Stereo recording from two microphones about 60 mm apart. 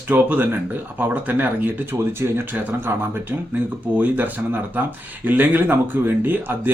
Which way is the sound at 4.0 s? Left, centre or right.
Right.